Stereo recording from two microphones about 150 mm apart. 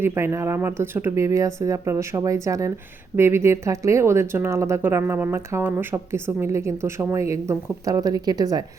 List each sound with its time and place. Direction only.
0.0 s a woman's voice: 15° right (ahead or behind)